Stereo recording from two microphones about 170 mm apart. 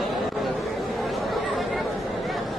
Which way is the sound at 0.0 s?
Centre (ahead or behind).